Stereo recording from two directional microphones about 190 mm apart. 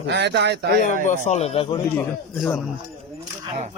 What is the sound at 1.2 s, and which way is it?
Speech, 35° left (ahead or behind).